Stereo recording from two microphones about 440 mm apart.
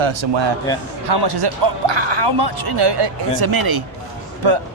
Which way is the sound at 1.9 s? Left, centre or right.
Right.